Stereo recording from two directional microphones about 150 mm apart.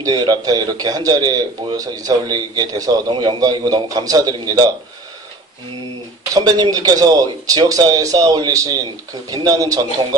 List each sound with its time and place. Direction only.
0.0 s a man's voice: 25° right (ahead or behind)
6.3 s a man's voice: 25° right (ahead or behind)